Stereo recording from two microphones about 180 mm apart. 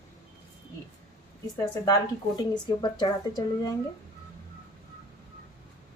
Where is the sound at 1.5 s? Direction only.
20° left (ahead or behind).